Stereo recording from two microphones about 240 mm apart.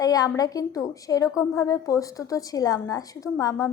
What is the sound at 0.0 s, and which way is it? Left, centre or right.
A woman's voice, centre.